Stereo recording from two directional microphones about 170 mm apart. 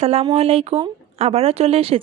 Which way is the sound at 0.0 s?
35° right (ahead or behind).